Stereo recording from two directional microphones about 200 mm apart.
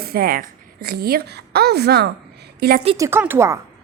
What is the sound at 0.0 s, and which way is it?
A woman's voice, 50° right (ahead or behind).